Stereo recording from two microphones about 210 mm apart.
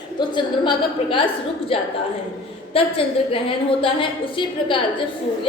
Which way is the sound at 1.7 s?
25° left (ahead or behind).